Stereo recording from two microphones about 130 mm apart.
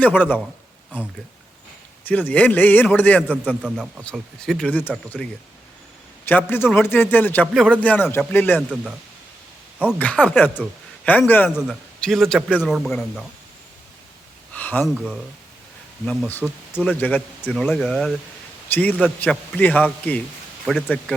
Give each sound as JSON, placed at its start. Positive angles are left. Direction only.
{"t": 0.0, "sound": "a man's voice", "side_deg": 15}
{"t": 2.0, "sound": "a man's voice", "side_deg": 10}
{"t": 3.5, "sound": "speech", "side_deg": -5}
{"t": 4.1, "sound": "a man's voice", "side_deg": 5}
{"t": 10.0, "sound": "a man's voice", "side_deg": 10}
{"t": 11.5, "sound": "a man's voice", "side_deg": 5}
{"t": 14.5, "sound": "a sound", "side_deg": 15}
{"t": 14.9, "sound": "a man's voice", "side_deg": -5}
{"t": 16.0, "sound": "a man's voice", "side_deg": 15}